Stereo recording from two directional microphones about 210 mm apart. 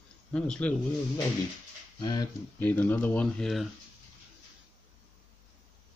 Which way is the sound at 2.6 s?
10° left (ahead or behind).